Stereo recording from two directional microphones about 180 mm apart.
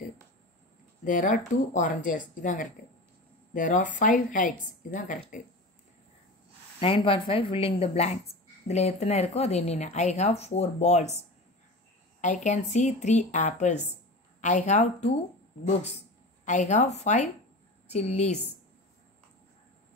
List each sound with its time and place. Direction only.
1.0 s a woman's voice: 45° left (ahead or behind)
6.8 s a woman's voice: 30° left (ahead or behind)